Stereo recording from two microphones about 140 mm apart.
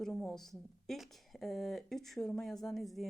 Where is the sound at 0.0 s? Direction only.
Centre (ahead or behind).